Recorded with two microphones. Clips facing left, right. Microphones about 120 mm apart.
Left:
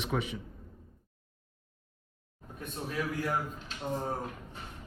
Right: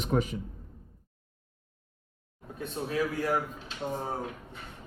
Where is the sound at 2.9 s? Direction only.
30° right (ahead or behind).